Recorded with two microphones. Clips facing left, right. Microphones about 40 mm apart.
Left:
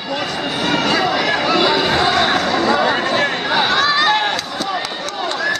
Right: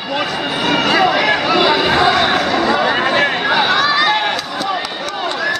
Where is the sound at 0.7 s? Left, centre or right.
Centre.